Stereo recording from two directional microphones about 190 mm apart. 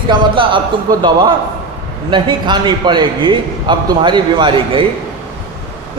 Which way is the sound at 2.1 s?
25° right (ahead or behind).